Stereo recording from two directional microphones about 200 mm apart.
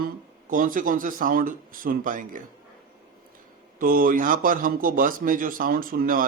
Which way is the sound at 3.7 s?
45° right (ahead or behind).